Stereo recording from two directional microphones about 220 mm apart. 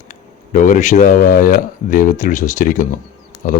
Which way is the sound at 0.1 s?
35° left (ahead or behind).